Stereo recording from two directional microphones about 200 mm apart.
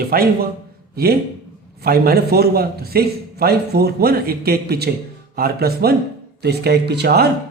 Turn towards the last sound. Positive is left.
turn(degrees=-55)  # may be behind; listen again after turning